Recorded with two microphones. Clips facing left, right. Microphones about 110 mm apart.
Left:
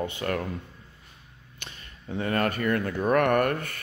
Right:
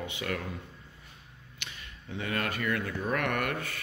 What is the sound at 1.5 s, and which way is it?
Speech, 40° left (ahead or behind).